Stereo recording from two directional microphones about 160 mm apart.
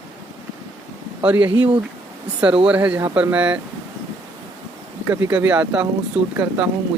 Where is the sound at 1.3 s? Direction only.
10° right (ahead or behind).